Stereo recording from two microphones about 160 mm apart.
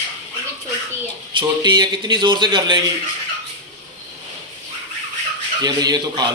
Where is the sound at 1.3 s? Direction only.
30° right (ahead or behind).